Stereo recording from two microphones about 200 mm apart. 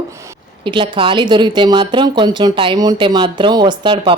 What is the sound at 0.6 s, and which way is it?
A woman's voice, 25° right (ahead or behind).